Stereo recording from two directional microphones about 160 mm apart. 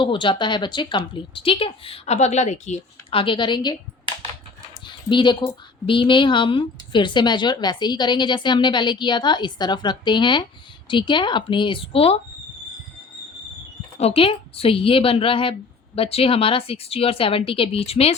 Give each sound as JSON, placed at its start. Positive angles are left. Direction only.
{"t": 0.0, "sound": "a woman's voice", "side_deg": 30}
{"t": 4.9, "sound": "a woman's voice", "side_deg": 30}
{"t": 14.0, "sound": "a woman's voice", "side_deg": 35}